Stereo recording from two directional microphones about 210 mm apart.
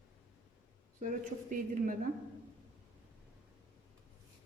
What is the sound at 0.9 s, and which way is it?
A woman's voice, 40° right (ahead or behind).